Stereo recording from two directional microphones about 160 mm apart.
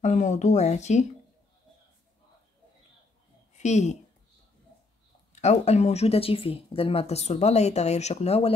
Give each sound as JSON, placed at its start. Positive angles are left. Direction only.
{"t": 0.0, "sound": "speech", "side_deg": 50}
{"t": 3.5, "sound": "a woman's voice", "side_deg": 45}
{"t": 5.3, "sound": "speech", "side_deg": 45}